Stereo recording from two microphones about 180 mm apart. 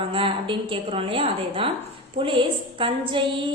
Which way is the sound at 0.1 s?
30° right (ahead or behind).